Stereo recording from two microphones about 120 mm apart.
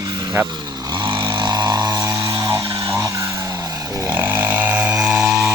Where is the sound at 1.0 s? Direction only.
45° right (ahead or behind); by 2.6 s 30° right (ahead or behind).